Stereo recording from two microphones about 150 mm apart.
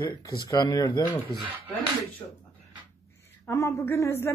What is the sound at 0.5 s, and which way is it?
Speech, 25° left (ahead or behind).